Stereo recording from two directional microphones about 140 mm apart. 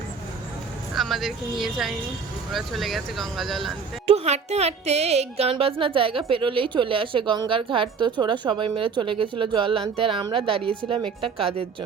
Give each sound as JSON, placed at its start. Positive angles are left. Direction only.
{"t": 0.9, "sound": "speech", "side_deg": 0}
{"t": 4.0, "sound": "a woman's voice", "side_deg": -45}